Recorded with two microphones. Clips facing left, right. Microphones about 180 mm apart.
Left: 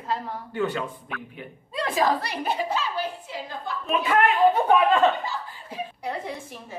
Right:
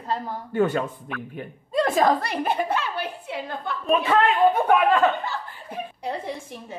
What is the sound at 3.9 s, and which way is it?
Speech, 30° right (ahead or behind).